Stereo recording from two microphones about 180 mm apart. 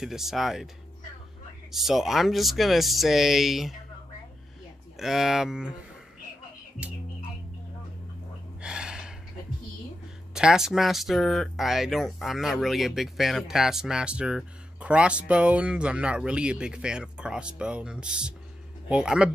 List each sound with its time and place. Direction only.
0.0 s speech: centre (ahead or behind)
1.7 s speech: centre (ahead or behind)
4.9 s speech: centre (ahead or behind)
8.5 s gasp: 5° right (ahead or behind)
10.3 s speech: 5° right (ahead or behind)